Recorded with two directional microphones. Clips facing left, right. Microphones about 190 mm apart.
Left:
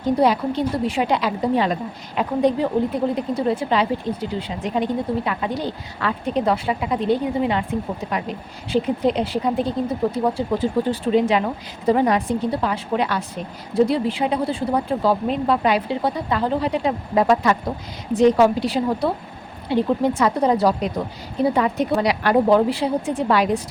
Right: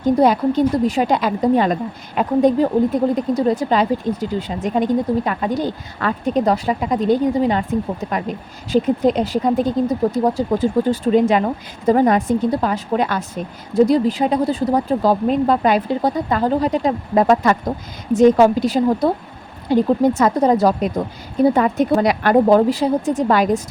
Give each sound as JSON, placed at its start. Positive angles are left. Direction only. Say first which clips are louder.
{"t": 0.0, "sound": "a woman's voice", "louder": "right 4 dB", "side_deg": -45}